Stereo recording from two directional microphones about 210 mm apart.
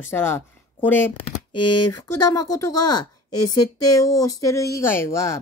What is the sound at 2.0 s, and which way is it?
Speech, 15° left (ahead or behind).